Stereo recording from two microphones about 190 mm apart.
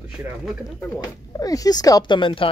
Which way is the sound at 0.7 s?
15° left (ahead or behind).